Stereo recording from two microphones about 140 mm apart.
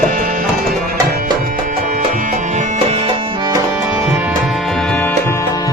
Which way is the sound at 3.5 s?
20° right (ahead or behind).